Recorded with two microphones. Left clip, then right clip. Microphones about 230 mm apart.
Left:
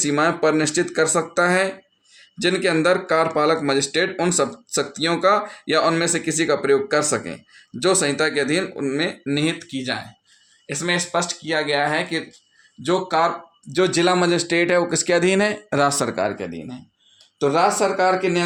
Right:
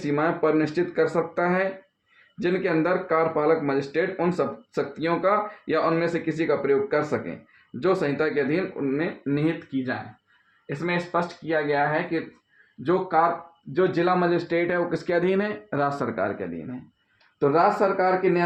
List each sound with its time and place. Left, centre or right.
0.0 s speech: left
17.4 s speech: left